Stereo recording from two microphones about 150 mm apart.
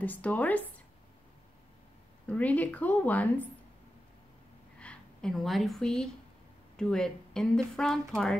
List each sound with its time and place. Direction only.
0.0 s a woman's voice: 10° left (ahead or behind)
2.2 s a woman's voice: 10° left (ahead or behind)
4.7 s a woman's voice: 5° left (ahead or behind)